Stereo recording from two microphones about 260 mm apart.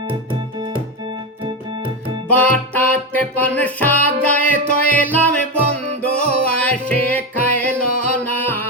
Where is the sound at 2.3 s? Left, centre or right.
Centre.